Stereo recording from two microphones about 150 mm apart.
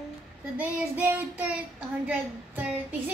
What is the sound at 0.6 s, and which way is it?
Child singing, 10° right (ahead or behind).